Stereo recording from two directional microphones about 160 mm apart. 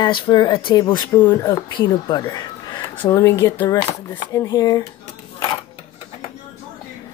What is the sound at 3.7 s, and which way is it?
Speech, 25° left (ahead or behind).